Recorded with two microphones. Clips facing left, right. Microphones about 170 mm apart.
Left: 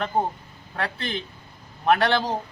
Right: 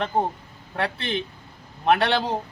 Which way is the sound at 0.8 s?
25° right (ahead or behind).